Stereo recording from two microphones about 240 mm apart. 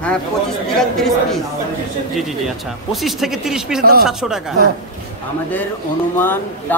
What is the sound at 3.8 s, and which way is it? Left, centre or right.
Speech, right.